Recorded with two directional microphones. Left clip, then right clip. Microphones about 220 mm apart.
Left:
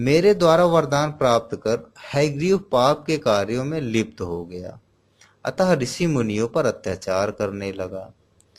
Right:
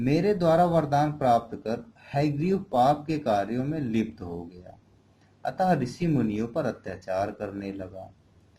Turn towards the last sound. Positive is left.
turn(degrees=45)  # may be behind; listen again after turning